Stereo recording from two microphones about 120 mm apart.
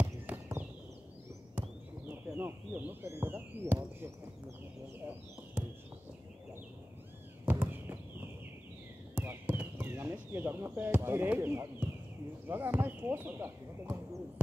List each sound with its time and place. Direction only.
0.0 s horse: 15° right (ahead or behind)
2.3 s speech: 15° right (ahead or behind)
7.4 s a sound: 15° right (ahead or behind)
9.1 s speech: 15° right (ahead or behind)